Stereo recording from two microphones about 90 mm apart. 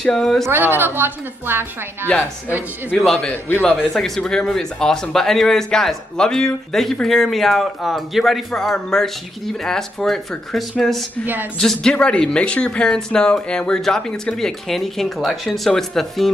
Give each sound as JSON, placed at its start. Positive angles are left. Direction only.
{"t": 0.0, "sound": "speech", "side_deg": 5}
{"t": 0.5, "sound": "a woman's voice", "side_deg": -25}
{"t": 3.0, "sound": "speech", "side_deg": 5}